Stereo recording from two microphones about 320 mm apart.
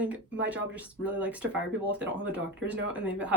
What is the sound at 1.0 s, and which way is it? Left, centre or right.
Speech, centre.